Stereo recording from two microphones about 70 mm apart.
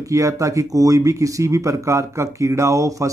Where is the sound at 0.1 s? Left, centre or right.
Right.